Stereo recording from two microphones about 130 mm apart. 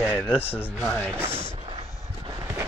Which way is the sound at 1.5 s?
45° right (ahead or behind).